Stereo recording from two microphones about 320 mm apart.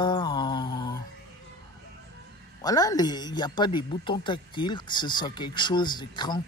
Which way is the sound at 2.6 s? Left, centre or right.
Centre.